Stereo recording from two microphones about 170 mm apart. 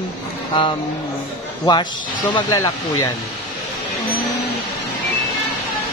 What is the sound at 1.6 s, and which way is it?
Speech, 25° left (ahead or behind).